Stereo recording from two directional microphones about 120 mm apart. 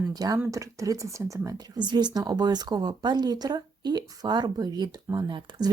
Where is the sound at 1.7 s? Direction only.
35° right (ahead or behind).